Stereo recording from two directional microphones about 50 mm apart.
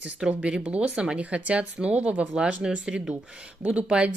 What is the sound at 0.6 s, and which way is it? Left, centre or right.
Speech, right.